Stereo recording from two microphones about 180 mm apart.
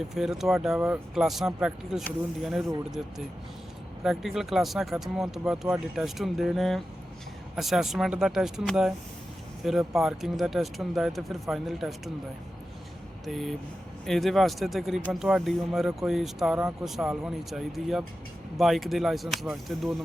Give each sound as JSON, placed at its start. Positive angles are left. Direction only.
{"t": 0.1, "sound": "speech", "side_deg": 0}
{"t": 4.0, "sound": "speech", "side_deg": 0}
{"t": 13.2, "sound": "speech", "side_deg": 0}